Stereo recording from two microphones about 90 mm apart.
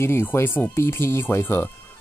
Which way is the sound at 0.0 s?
30° left (ahead or behind).